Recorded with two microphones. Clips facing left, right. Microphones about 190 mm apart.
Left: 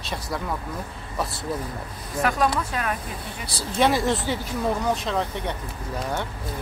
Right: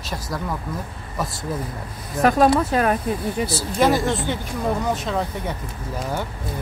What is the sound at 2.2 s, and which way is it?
Speech, 40° right (ahead or behind).